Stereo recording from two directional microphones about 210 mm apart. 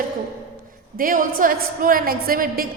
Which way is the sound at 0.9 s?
40° right (ahead or behind).